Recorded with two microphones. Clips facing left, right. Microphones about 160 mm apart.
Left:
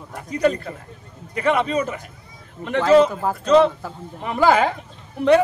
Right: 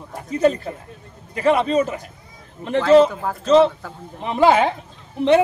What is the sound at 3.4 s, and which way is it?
A man's voice, 30° right (ahead or behind).